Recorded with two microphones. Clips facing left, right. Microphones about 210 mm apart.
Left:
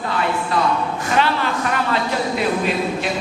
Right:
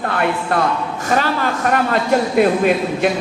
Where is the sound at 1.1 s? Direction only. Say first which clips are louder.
Right 1 dB; 40° right (ahead or behind).